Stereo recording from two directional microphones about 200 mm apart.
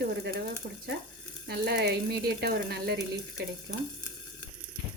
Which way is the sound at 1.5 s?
55° right (ahead or behind).